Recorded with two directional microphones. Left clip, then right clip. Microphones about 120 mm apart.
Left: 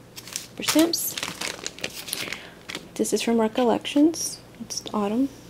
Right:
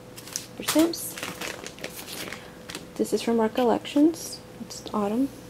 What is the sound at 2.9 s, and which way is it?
Speech, 30° left (ahead or behind).